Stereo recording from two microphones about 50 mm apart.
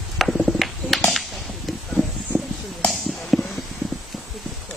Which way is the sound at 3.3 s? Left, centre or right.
Centre.